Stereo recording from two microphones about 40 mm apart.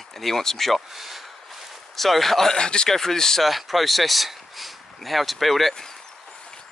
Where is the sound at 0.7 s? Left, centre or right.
Centre.